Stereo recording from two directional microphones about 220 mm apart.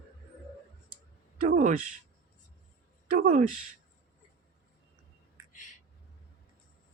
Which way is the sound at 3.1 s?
35° right (ahead or behind).